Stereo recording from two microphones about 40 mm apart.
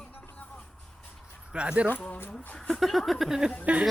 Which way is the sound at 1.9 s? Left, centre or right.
Left.